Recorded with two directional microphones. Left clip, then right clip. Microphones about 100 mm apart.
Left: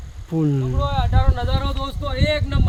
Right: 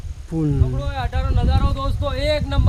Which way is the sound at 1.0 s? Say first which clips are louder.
Left 3 dB; 20° right (ahead or behind).